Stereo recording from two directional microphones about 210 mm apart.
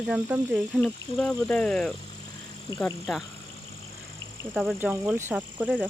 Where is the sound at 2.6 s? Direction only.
15° left (ahead or behind).